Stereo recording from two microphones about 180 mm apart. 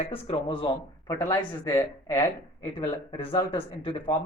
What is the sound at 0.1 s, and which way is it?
Speech, 30° left (ahead or behind).